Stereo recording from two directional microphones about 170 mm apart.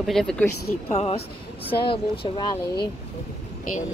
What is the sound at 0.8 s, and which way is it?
Speech, 40° left (ahead or behind).